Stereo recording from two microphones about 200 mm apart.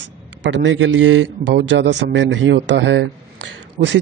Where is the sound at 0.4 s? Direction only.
70° right (ahead or behind).